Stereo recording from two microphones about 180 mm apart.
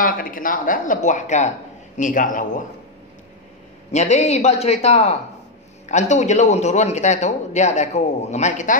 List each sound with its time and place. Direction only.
0.0 s speech: 50° left (ahead or behind)
3.9 s speech: 40° left (ahead or behind)